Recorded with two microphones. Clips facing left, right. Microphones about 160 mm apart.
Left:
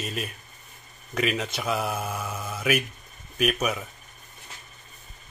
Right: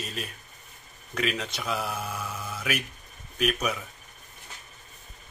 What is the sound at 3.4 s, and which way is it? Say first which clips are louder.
Speech: left 2 dB; 5° left (ahead or behind).